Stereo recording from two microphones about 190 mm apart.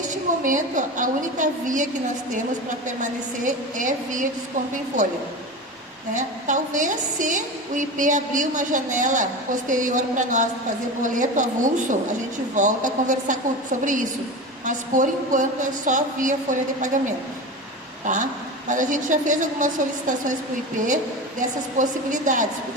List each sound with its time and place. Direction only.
0.4 s a woman's voice: 40° right (ahead or behind)
6.1 s a woman's voice: 40° right (ahead or behind)
14.6 s a woman's voice: 40° right (ahead or behind)
18.0 s a woman's voice: 40° right (ahead or behind)
21.8 s a woman's voice: 40° right (ahead or behind)